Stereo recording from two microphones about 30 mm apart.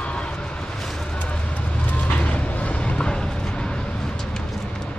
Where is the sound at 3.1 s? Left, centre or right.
Left.